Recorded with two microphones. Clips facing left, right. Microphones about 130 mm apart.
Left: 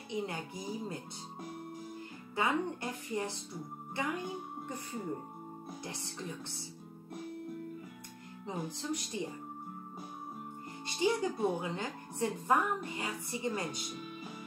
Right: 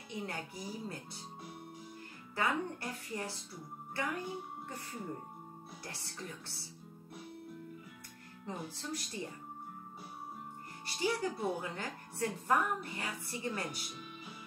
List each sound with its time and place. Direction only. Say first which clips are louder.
0.1 s a woman's voice: left 4 dB; 20° left (ahead or behind)
2.3 s a woman's voice: left 2 dB; 20° left (ahead or behind)
8.5 s speech: left 4 dB; 15° left (ahead or behind)
11.0 s a woman's voice: left 4 dB; 20° left (ahead or behind)